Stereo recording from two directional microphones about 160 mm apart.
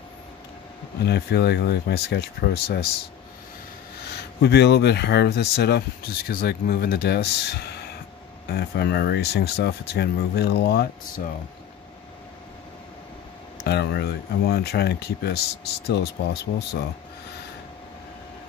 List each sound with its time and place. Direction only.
1.0 s speech: 90° left
4.4 s speech: 90° left
13.7 s speech: 90° left